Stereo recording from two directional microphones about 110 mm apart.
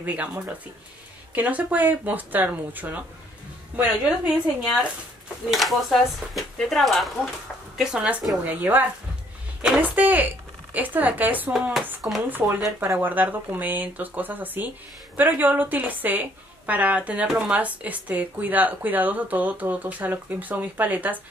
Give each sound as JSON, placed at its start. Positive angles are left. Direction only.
{"t": 0.0, "sound": "a woman's voice", "side_deg": -15}
{"t": 5.5, "sound": "a woman's voice", "side_deg": 0}
{"t": 11.7, "sound": "speech", "side_deg": 0}
{"t": 12.3, "sound": "a woman's voice", "side_deg": -15}